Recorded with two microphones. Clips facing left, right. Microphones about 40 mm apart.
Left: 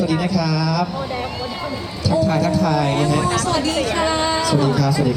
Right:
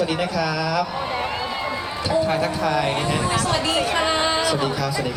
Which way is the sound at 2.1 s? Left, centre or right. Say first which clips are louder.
Left 3 dB; right.